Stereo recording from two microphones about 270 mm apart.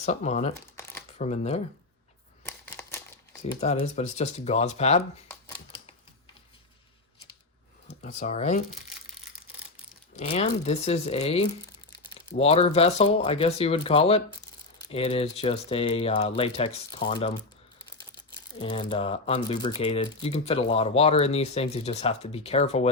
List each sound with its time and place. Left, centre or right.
0.0 s speech: left
0.5 s crumpling: centre
1.2 s speech: left
2.4 s crumpling: centre
3.4 s speech: left
5.3 s typewriter: centre
8.0 s speech: left
10.2 s speech: left
18.6 s speech: centre